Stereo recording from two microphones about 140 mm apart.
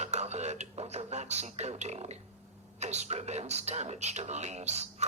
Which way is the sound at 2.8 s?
50° right (ahead or behind).